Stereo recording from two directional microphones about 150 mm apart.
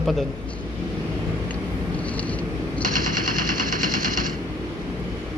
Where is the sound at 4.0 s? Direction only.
65° right (ahead or behind).